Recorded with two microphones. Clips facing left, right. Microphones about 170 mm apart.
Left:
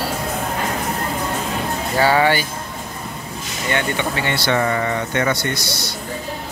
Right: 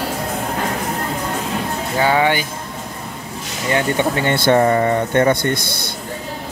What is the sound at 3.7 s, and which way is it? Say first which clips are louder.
Speech: right 4 dB; 45° right (ahead or behind).